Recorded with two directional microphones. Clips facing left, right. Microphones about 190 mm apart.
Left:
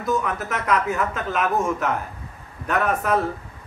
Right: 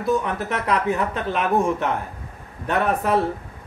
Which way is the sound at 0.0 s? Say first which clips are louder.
Right 2 dB; 30° right (ahead or behind).